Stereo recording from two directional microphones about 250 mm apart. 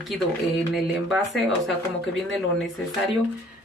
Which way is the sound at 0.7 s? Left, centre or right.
Centre.